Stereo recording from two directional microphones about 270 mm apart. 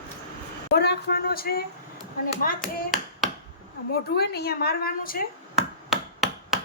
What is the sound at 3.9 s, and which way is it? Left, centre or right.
A woman's voice, left.